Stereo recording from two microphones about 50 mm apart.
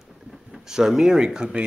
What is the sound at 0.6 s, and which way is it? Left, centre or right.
Speech, centre.